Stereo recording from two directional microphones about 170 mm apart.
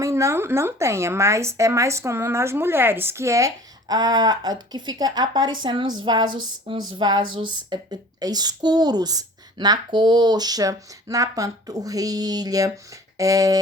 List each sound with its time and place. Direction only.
0.0 s a woman's voice: 15° right (ahead or behind)